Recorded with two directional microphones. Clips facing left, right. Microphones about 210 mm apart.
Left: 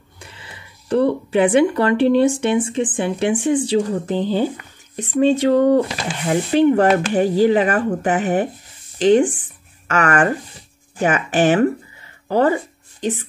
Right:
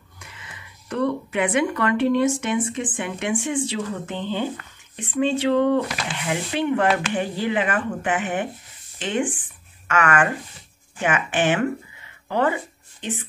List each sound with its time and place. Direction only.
0.2 s speech: 30° left (ahead or behind)